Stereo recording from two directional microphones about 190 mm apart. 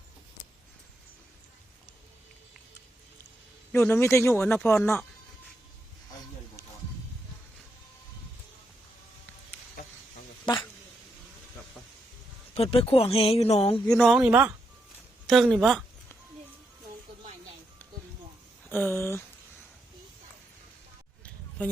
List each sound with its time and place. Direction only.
3.7 s speech: 10° left (ahead or behind)
10.4 s a sound: 25° left (ahead or behind)
12.5 s speech: 30° left (ahead or behind)
13.8 s speech: centre (ahead or behind)
18.7 s speech: 10° left (ahead or behind)